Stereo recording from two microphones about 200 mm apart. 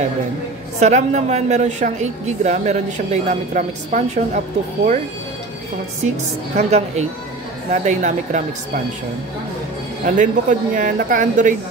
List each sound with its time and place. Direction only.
0.7 s a woman's voice: 35° right (ahead or behind)
6.0 s a woman's voice: 35° right (ahead or behind)
10.0 s a woman's voice: 40° right (ahead or behind)